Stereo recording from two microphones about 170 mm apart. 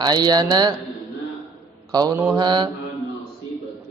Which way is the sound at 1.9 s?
25° right (ahead or behind).